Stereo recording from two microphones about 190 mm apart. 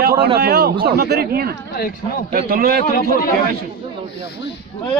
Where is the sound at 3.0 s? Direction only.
50° left (ahead or behind).